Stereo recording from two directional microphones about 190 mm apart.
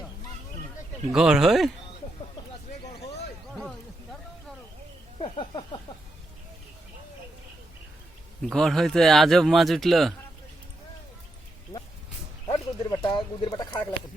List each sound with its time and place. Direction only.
1.1 s a man's voice: centre (ahead or behind)
5.2 s a sound: 25° left (ahead or behind)
8.4 s a man's voice: centre (ahead or behind)
12.5 s speech: 20° left (ahead or behind)